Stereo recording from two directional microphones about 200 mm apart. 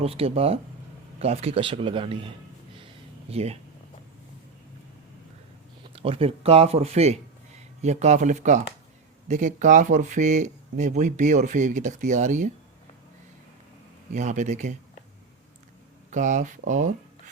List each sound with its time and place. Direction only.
0.0 s speech: 30° right (ahead or behind)
2.7 s a sound: 30° right (ahead or behind)
5.9 s speech: 30° right (ahead or behind)
14.1 s speech: 35° right (ahead or behind)
16.0 s speech: 40° right (ahead or behind)